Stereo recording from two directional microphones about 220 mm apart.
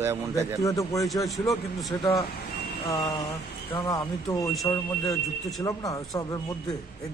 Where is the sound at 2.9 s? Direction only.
15° left (ahead or behind).